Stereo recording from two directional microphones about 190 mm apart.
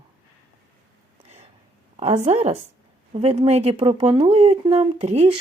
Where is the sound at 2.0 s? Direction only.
35° right (ahead or behind).